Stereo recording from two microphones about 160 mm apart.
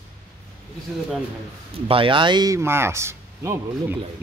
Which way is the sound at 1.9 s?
35° right (ahead or behind).